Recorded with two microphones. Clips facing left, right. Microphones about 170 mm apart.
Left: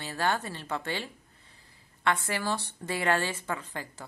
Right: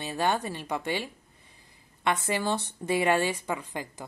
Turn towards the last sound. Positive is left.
turn(degrees=-15)  # may be behind; listen again after turning